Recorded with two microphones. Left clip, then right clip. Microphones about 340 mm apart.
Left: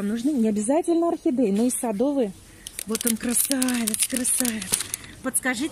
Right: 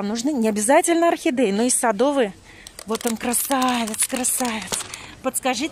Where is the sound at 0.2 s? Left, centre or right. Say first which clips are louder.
Right 2 dB; right.